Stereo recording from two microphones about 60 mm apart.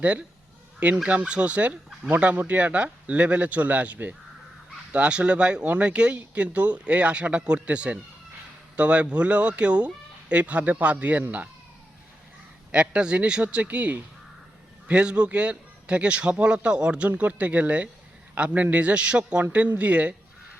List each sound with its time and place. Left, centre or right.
0.0 s speech: right
12.7 s speech: centre